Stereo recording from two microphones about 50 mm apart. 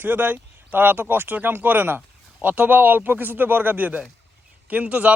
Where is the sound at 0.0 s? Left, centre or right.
Right.